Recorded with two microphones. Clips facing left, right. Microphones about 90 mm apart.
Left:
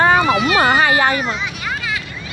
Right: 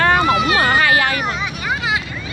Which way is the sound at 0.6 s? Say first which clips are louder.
Left 1 dB; 25° left (ahead or behind).